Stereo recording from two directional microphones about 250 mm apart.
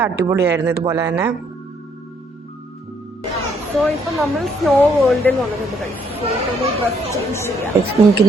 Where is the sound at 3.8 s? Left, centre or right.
Centre.